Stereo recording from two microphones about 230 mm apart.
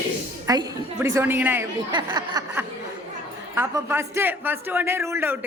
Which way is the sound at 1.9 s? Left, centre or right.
Centre.